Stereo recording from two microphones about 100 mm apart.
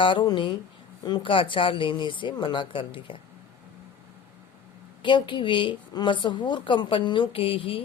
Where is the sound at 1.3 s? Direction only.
60° left (ahead or behind).